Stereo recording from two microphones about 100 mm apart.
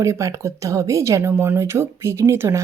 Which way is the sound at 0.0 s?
30° right (ahead or behind).